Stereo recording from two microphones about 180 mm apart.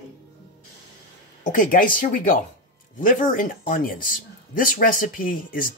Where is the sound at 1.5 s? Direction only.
50° left (ahead or behind).